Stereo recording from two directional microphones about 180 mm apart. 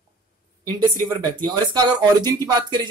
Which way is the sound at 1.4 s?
25° right (ahead or behind).